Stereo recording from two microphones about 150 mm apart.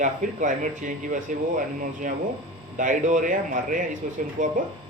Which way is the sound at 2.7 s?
60° right (ahead or behind).